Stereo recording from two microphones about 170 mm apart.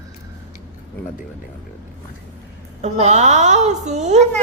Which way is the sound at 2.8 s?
40° right (ahead or behind).